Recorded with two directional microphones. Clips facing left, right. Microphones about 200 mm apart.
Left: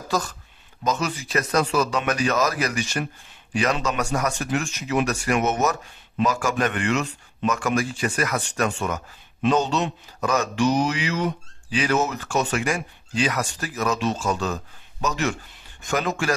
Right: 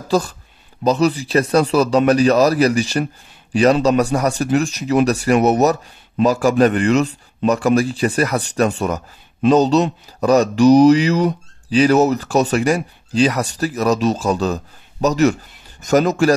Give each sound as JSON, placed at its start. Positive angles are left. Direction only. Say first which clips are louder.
{"t": 0.1, "sound": "speech", "louder": "right 8 dB", "side_deg": -30}